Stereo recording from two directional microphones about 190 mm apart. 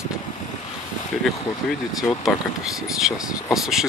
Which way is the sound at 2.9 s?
Centre (ahead or behind).